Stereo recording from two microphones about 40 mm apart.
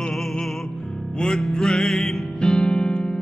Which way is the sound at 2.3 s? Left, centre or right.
Left.